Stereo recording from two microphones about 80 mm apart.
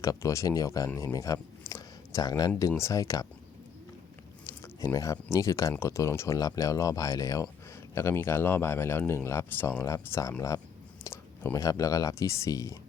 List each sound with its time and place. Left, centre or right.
0.0 s speech: left
0.9 s a sound: left
2.6 s speech: left
4.4 s a sound: left
4.9 s speech: left
7.9 s speech: left
9.8 s speech: left
11.5 s speech: left